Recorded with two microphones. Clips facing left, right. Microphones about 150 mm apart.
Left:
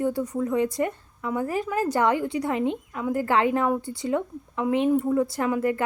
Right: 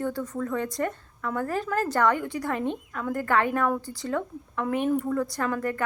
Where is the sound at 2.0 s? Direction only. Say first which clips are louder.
Left 1 dB; 20° left (ahead or behind).